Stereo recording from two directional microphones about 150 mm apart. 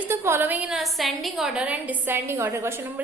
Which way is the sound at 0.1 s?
15° right (ahead or behind).